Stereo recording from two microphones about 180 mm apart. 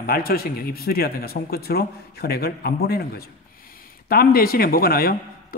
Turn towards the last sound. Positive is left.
turn(degrees=55)  # may be behind; listen again after turning